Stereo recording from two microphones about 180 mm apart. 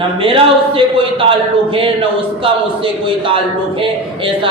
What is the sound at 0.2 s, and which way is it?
A man's voice, 30° right (ahead or behind).